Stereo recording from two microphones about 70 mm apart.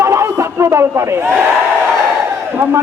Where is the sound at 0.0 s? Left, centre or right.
Right.